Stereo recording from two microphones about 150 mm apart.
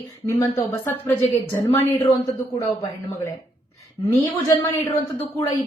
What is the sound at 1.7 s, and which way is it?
A woman's voice, 15° left (ahead or behind).